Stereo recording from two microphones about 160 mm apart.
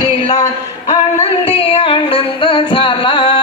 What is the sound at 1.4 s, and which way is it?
Music, 35° left (ahead or behind).